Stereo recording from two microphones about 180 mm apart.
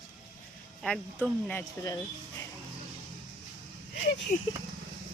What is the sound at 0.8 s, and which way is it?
Speech, 5° left (ahead or behind).